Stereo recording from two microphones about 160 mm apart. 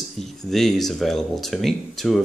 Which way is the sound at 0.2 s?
Centre (ahead or behind).